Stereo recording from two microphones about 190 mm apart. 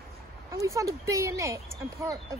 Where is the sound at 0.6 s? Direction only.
15° right (ahead or behind).